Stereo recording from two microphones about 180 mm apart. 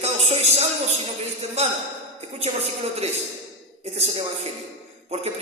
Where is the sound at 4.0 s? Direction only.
35° right (ahead or behind).